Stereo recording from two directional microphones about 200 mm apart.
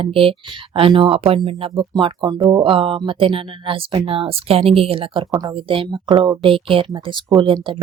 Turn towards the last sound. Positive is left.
turn(degrees=-25)  # may be behind; listen again after turning